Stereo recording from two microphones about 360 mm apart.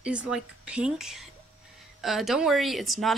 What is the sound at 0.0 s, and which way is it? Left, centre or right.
Speech, centre.